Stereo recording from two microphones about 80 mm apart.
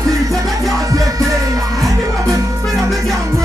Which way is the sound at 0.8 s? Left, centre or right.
Right.